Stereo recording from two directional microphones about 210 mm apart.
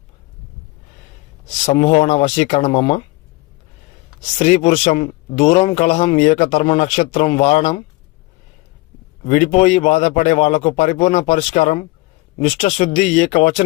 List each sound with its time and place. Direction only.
1.6 s speech: 30° left (ahead or behind)
4.4 s speech: 30° left (ahead or behind)
9.3 s speech: 30° left (ahead or behind)